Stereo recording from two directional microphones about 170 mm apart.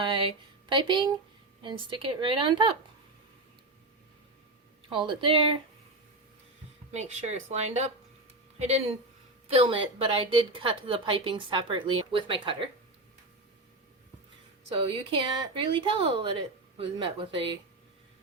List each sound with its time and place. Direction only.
0.0 s a woman's voice: 30° right (ahead or behind)
4.9 s a woman's voice: 30° right (ahead or behind)
6.9 s a woman's voice: 40° right (ahead or behind)
14.8 s speech: 30° right (ahead or behind)